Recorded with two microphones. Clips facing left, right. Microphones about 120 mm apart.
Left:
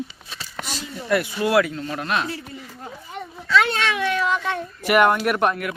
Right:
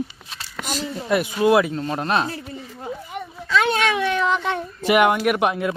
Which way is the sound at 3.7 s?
20° right (ahead or behind).